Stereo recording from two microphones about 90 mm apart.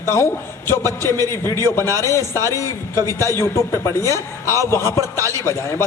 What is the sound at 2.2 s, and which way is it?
Speech, 35° right (ahead or behind).